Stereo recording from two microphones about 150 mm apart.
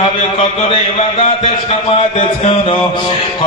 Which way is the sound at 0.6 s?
35° left (ahead or behind).